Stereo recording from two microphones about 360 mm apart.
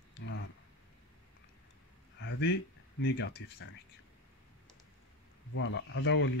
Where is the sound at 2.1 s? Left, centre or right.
Left.